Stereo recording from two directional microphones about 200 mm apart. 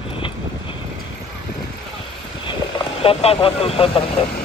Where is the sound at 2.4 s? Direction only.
25° left (ahead or behind).